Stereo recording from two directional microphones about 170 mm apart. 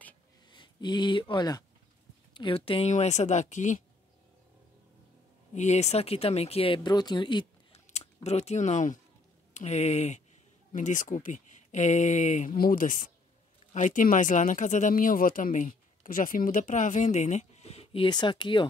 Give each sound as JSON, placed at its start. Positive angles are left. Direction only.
{"t": 0.5, "sound": "a sound", "side_deg": 25}
{"t": 1.3, "sound": "speech", "side_deg": 25}
{"t": 5.5, "sound": "speech", "side_deg": 45}
{"t": 7.8, "sound": "speech", "side_deg": 40}